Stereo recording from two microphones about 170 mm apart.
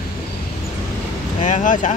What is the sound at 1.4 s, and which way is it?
Speech, 45° left (ahead or behind).